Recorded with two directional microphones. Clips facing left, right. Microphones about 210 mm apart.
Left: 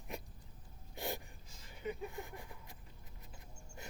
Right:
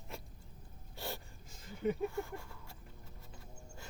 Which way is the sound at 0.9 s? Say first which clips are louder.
Left 2 dB; 15° left (ahead or behind).